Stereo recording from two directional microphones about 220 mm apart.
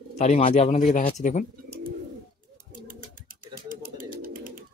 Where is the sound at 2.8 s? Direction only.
40° right (ahead or behind).